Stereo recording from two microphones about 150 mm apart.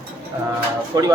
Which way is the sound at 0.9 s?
25° right (ahead or behind).